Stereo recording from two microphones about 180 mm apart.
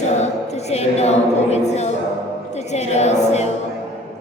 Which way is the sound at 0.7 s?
35° left (ahead or behind).